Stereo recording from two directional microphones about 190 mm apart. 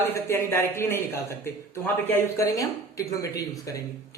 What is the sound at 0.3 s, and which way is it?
Speech, 15° left (ahead or behind).